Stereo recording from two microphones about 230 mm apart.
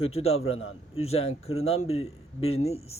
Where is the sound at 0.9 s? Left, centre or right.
Left.